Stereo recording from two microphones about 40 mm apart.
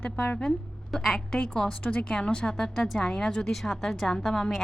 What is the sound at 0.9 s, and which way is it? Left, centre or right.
Speech, centre.